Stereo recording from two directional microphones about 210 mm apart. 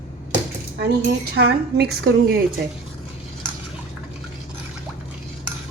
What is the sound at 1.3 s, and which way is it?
A woman's voice, 50° right (ahead or behind).